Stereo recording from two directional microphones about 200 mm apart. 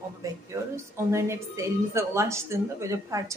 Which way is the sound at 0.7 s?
15° right (ahead or behind).